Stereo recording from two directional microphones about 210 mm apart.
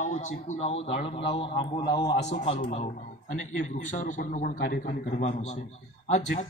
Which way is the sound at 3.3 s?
35° left (ahead or behind).